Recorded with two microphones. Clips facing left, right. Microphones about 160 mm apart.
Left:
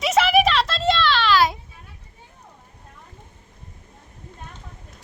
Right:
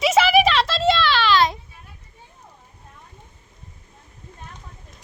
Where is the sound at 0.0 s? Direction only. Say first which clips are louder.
Right 1 dB; centre (ahead or behind).